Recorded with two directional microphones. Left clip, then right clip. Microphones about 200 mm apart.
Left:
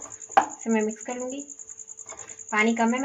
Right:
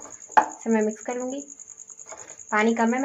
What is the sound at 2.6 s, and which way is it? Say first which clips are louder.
Speech: even; 30° right (ahead or behind).